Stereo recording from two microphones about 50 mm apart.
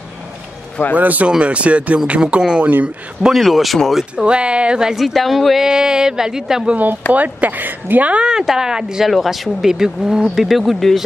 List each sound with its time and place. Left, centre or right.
0.9 s speech: right
3.3 s speech: centre
4.3 s speech: right
4.9 s speech: centre
5.7 s speech: centre
6.7 s speech: right
8.1 s speech: centre
9.1 s speech: centre